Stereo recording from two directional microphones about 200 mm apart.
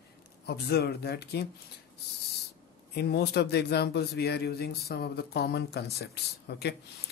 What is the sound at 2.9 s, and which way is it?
Speech, 55° left (ahead or behind).